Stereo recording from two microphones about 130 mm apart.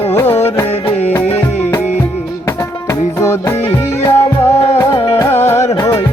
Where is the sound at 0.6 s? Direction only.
55° left (ahead or behind).